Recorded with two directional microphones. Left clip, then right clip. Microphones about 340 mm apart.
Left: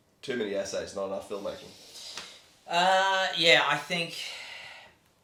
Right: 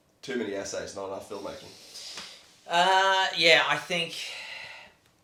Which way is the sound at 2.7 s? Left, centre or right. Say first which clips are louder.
Right 2 dB; right.